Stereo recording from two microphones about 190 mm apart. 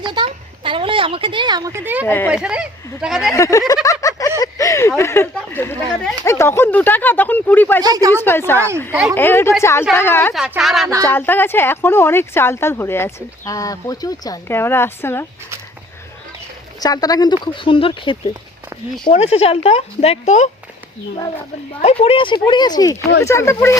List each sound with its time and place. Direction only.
0.0 s a sound: 25° right (ahead or behind)
2.0 s speech: 10° left (ahead or behind)
2.3 s speech: 5° right (ahead or behind)
3.2 s speech: 15° left (ahead or behind)
4.0 s a sound: 15° left (ahead or behind)
6.2 s speech: 15° left (ahead or behind)
7.8 s speech: 20° right (ahead or behind)
8.1 s speech: 10° left (ahead or behind)
8.9 s speech: 5° right (ahead or behind)
9.1 s speech: 10° left (ahead or behind)
10.3 s speech: 5° right (ahead or behind)
11.0 s speech: 10° left (ahead or behind)
16.8 s speech: 20° left (ahead or behind); by 20.5 s 35° left (ahead or behind)
21.8 s speech: 35° left (ahead or behind); by 23.7 s 15° left (ahead or behind)